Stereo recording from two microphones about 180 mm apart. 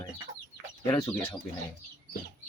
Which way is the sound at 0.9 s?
10° left (ahead or behind).